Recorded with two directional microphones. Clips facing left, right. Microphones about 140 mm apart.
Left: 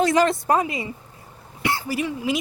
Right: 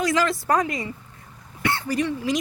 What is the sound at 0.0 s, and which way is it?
Speech, 25° left (ahead or behind).